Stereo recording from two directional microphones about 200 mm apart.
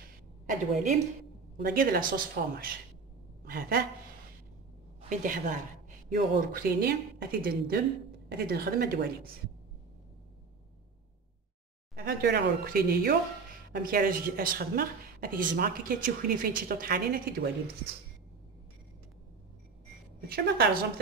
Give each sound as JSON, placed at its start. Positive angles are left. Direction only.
{"t": 0.5, "sound": "a woman's voice", "side_deg": -35}
{"t": 5.1, "sound": "a woman's voice", "side_deg": -40}
{"t": 11.9, "sound": "a woman's voice", "side_deg": -50}
{"t": 20.2, "sound": "a woman's voice", "side_deg": -50}